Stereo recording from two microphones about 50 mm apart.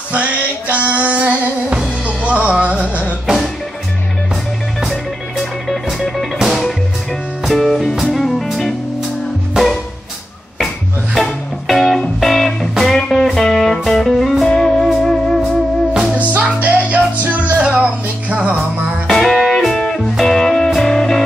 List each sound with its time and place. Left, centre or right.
0.1 s music: right
3.3 s music: centre
5.9 s music: centre
11.1 s music: centre
15.9 s music: centre
16.2 s music: right
19.0 s music: centre